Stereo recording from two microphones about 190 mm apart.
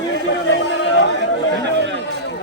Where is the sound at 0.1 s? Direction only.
70° left (ahead or behind).